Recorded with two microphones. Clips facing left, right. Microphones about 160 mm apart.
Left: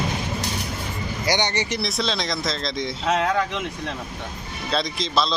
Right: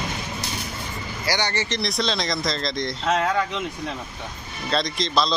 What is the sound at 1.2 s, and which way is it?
Speech, 20° left (ahead or behind).